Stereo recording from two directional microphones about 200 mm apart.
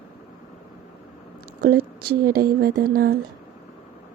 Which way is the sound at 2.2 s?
50° right (ahead or behind).